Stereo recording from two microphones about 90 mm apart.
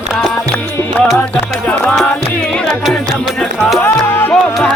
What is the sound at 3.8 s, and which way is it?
Music, 20° left (ahead or behind).